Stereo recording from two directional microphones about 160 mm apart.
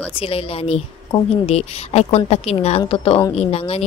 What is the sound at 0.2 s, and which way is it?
Speech, 35° left (ahead or behind).